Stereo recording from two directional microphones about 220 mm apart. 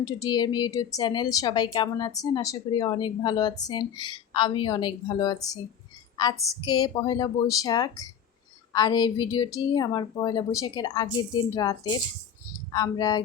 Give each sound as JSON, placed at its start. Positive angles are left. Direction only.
{"t": 0.0, "sound": "speech", "side_deg": 20}